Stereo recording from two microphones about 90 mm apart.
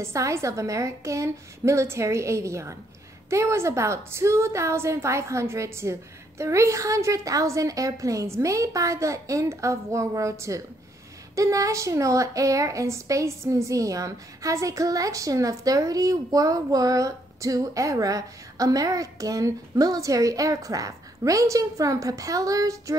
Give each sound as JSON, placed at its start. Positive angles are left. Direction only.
{"t": 0.0, "sound": "a woman's voice", "side_deg": -30}